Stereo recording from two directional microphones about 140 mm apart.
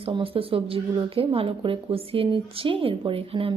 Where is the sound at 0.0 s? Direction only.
40° right (ahead or behind).